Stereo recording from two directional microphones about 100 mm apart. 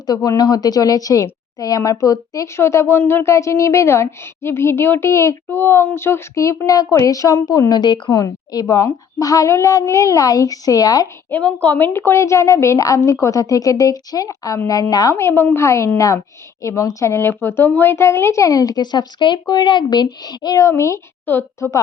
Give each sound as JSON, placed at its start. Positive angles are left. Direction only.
{"t": 0.0, "sound": "a woman's voice", "side_deg": 40}
{"t": 7.7, "sound": "a woman's voice", "side_deg": 45}
{"t": 8.2, "sound": "speech", "side_deg": 35}
{"t": 11.3, "sound": "speech", "side_deg": 15}
{"t": 15.1, "sound": "a woman's voice", "side_deg": 20}